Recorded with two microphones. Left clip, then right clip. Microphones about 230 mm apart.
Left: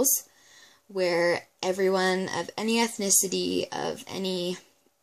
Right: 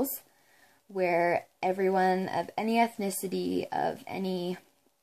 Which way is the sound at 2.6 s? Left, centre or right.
Centre.